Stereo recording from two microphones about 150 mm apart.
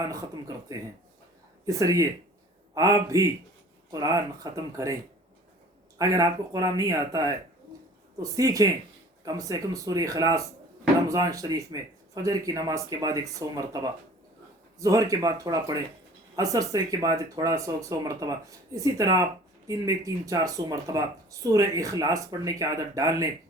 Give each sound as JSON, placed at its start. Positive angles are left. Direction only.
{"t": 0.0, "sound": "speech", "side_deg": -20}
{"t": 6.0, "sound": "speech", "side_deg": -25}